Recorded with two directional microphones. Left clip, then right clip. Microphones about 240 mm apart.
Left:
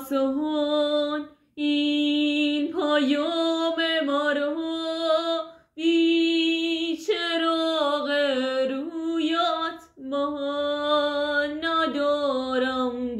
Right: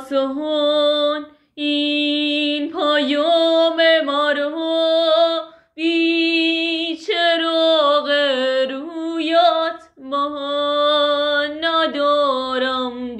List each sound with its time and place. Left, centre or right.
0.4 s female singing: centre
10.1 s music: centre